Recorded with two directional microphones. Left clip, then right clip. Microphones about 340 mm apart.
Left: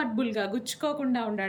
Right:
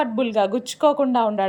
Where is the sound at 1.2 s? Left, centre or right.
Right.